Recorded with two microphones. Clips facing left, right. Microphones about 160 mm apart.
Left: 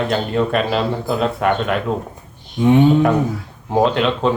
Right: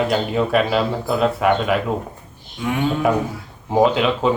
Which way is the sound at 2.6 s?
25° left (ahead or behind).